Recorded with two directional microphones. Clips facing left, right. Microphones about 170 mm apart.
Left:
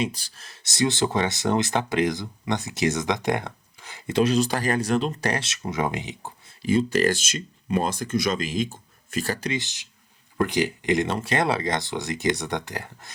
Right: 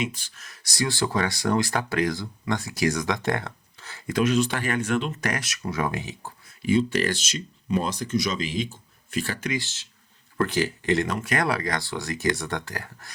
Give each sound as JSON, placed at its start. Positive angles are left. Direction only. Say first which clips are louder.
{"t": 0.0, "sound": "speech", "louder": "left 2 dB", "side_deg": 35}
{"t": 6.6, "sound": "speech", "louder": "left 1 dB", "side_deg": 45}
{"t": 9.5, "sound": "speech", "louder": "even", "side_deg": 20}
{"t": 11.1, "sound": "speech", "louder": "left 2 dB", "side_deg": 30}